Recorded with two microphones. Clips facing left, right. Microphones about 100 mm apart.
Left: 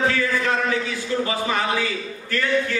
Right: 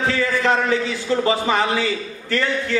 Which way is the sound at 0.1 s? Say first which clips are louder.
Right 3 dB; 30° right (ahead or behind).